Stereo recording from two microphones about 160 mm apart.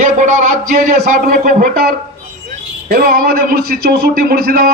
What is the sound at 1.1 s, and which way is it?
Speech, 65° right (ahead or behind).